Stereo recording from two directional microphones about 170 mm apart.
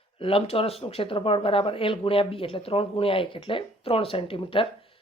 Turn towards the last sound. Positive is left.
turn(degrees=30)  # may be behind; listen again after turning